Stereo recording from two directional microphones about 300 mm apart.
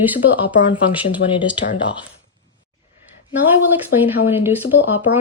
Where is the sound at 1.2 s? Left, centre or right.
Left.